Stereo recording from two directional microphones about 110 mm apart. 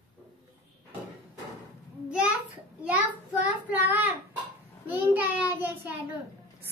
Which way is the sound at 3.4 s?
15° right (ahead or behind).